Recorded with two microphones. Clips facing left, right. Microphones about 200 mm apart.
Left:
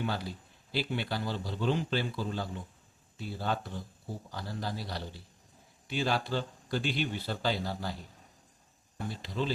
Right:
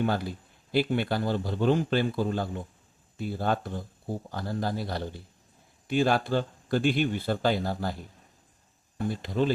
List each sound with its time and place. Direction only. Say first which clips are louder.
0.0 s speech: right 7 dB; 50° right (ahead or behind)
9.0 s speech: right 7 dB; 55° right (ahead or behind)